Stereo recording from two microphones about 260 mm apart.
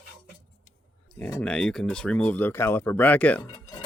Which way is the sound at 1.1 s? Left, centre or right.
Centre.